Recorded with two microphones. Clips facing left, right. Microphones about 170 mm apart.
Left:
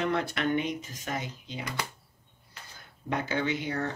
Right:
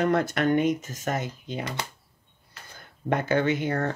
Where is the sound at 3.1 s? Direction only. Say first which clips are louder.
Right 6 dB; 50° right (ahead or behind).